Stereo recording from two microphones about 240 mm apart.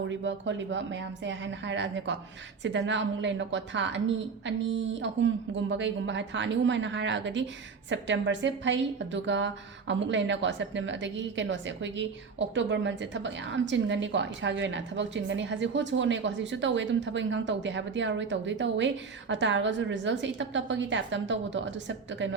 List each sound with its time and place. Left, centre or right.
0.1 s a woman's voice: right